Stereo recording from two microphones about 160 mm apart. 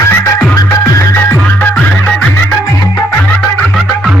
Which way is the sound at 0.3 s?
20° left (ahead or behind).